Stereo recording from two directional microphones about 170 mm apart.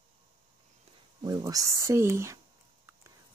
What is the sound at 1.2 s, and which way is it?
Speech, 20° right (ahead or behind).